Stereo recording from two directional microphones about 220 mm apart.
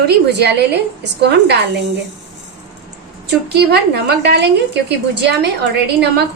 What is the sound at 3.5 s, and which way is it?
A woman's voice, 50° right (ahead or behind).